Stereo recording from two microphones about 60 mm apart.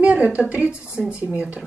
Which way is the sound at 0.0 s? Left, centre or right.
Right.